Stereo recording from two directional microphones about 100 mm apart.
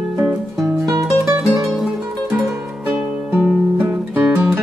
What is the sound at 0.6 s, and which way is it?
Music, 30° right (ahead or behind).